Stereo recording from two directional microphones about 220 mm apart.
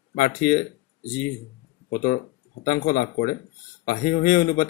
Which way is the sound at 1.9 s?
35° left (ahead or behind).